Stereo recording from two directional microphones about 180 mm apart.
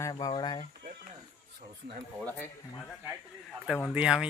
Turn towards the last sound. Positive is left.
turn(degrees=-5)  # may be behind; listen again after turning